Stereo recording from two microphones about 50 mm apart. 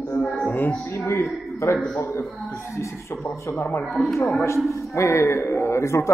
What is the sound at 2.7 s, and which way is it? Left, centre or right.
Speech, left.